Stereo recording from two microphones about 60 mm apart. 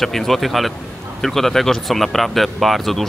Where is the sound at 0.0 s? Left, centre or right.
Centre.